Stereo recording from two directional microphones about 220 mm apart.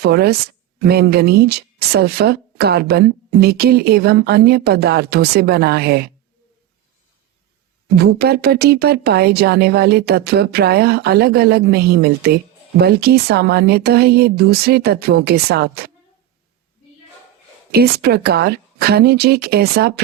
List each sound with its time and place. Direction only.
0.0 s speech: 45° right (ahead or behind)
7.9 s speech: 45° right (ahead or behind)
17.7 s speech: 45° right (ahead or behind)